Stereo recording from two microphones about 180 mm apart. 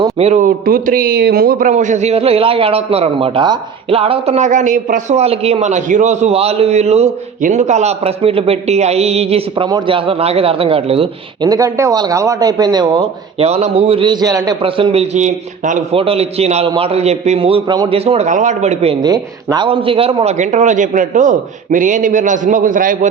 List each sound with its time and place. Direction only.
0.2 s a man's voice: 40° right (ahead or behind); by 14.5 s 20° right (ahead or behind)
14.6 s a man's voice: 30° right (ahead or behind)
19.0 s a man's voice: 20° right (ahead or behind); by 23.0 s 50° right (ahead or behind)